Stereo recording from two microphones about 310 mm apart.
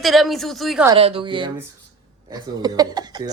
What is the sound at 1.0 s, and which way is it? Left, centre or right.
A woman's voice, centre.